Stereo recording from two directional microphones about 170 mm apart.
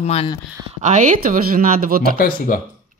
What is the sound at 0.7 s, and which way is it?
Speech, 45° right (ahead or behind).